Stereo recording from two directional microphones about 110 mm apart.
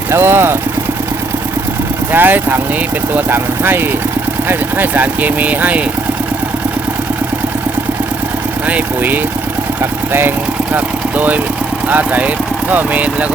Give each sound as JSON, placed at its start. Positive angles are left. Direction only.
{"t": 0.1, "sound": "speech", "side_deg": -20}
{"t": 2.1, "sound": "speech", "side_deg": -15}
{"t": 8.6, "sound": "speech", "side_deg": -15}